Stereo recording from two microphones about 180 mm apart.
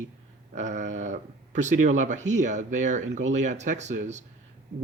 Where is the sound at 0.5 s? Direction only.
40° right (ahead or behind).